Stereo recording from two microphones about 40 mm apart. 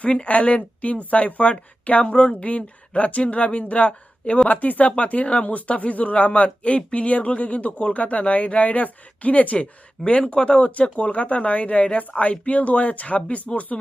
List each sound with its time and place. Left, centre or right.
0.0 s speech: left
10.1 s speech: left